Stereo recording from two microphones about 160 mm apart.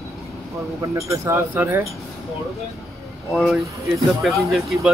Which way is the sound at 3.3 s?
Centre (ahead or behind).